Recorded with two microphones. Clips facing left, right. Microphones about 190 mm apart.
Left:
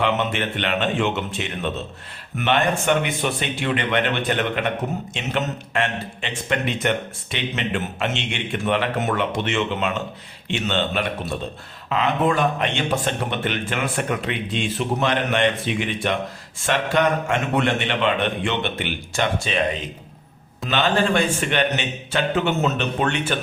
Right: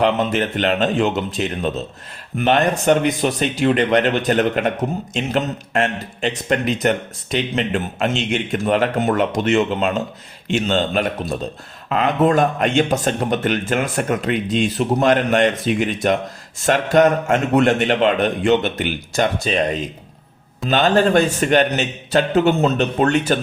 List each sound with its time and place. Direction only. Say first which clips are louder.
0.0 s a man's voice: right 5 dB; 40° right (ahead or behind)
20.7 s speech: right 5 dB; 40° right (ahead or behind)